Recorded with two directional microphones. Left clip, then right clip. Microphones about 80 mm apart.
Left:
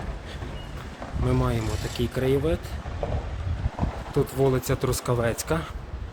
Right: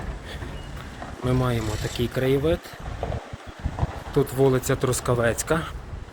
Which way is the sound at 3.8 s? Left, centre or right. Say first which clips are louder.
Even; right.